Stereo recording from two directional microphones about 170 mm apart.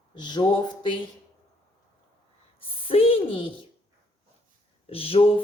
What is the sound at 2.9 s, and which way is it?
Speech, 35° left (ahead or behind).